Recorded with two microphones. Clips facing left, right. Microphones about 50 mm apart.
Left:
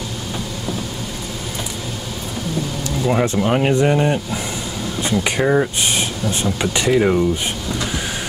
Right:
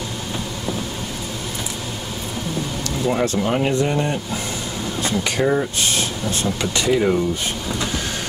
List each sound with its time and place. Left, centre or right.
3.1 s speech: centre